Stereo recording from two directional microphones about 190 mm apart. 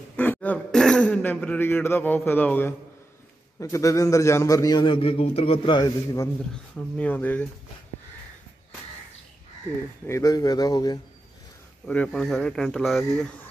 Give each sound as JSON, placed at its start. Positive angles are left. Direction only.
{"t": 0.1, "sound": "a man's voice", "side_deg": 10}
{"t": 7.0, "sound": "a man's voice", "side_deg": 10}
{"t": 10.0, "sound": "speech", "side_deg": 15}
{"t": 11.9, "sound": "speech", "side_deg": 5}